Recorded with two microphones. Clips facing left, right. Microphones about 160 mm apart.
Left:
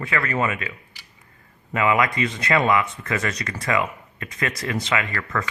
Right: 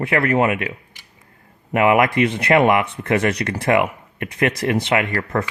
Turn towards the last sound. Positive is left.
turn(degrees=-60)  # may be behind; listen again after turning